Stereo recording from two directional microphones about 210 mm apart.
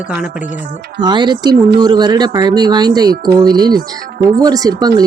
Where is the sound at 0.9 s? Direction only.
20° right (ahead or behind).